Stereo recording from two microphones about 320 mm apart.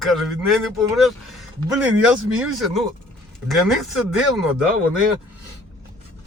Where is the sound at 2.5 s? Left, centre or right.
Centre.